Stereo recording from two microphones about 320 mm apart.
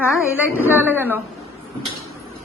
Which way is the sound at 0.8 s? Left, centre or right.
Centre.